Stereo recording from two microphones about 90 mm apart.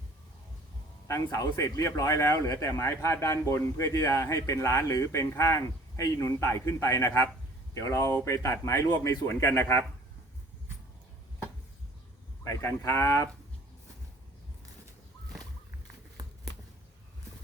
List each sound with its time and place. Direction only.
1.0 s speech: 35° left (ahead or behind)
12.5 s speech: 35° left (ahead or behind)